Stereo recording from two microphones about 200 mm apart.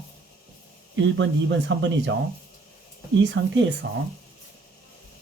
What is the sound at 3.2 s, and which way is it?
Speech, 65° right (ahead or behind).